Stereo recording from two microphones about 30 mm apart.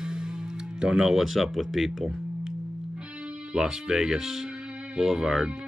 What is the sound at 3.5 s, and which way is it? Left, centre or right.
Speech, centre.